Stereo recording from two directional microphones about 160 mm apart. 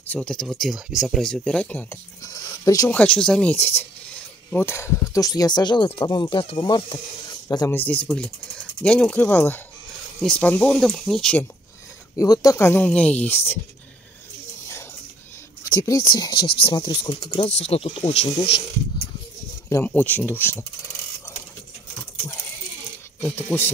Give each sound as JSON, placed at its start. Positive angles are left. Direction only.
{"t": 0.0, "sound": "speech", "side_deg": 10}
{"t": 2.2, "sound": "a sound", "side_deg": 25}
{"t": 3.0, "sound": "mechanisms", "side_deg": 5}
{"t": 6.0, "sound": "speech", "side_deg": 25}
{"t": 12.2, "sound": "speech", "side_deg": 20}
{"t": 15.7, "sound": "speech", "side_deg": 20}
{"t": 16.3, "sound": "speech", "side_deg": 80}
{"t": 16.6, "sound": "speech", "side_deg": 30}
{"t": 19.7, "sound": "speech", "side_deg": 10}
{"t": 23.2, "sound": "speech", "side_deg": 15}